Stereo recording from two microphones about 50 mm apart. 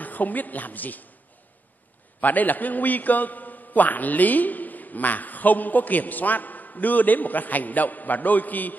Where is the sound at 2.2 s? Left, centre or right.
Left.